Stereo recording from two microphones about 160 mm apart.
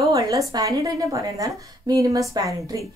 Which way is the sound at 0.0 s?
20° right (ahead or behind).